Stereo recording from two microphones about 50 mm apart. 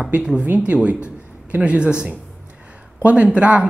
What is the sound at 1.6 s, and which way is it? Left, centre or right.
Speech, centre.